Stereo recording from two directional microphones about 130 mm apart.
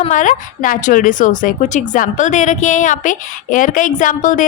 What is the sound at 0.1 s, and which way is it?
Speech, 80° left.